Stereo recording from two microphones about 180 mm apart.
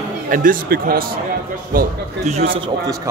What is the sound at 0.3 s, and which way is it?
Speech, 50° right (ahead or behind).